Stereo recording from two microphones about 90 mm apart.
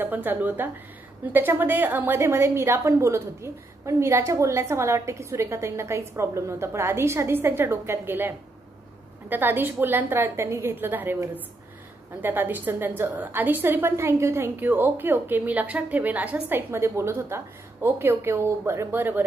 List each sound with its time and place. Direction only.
0.0 s a woman's voice: 20° right (ahead or behind)
12.2 s a woman's voice: 20° right (ahead or behind)